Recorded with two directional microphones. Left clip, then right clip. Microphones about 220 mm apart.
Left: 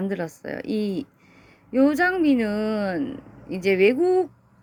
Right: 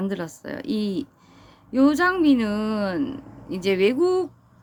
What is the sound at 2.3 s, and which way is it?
Speech, 10° left (ahead or behind).